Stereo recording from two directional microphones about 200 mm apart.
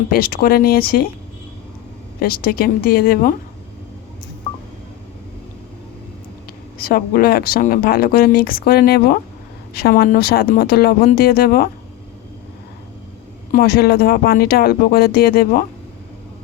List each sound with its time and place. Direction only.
0.1 s speech: 45° left (ahead or behind)
2.1 s speech: 50° left (ahead or behind)
6.7 s speech: 50° left (ahead or behind)
13.5 s speech: 50° left (ahead or behind)